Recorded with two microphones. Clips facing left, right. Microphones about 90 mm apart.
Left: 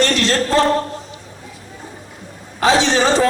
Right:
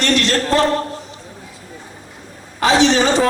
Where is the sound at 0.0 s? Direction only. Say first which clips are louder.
Left 1 dB; 35° left (ahead or behind).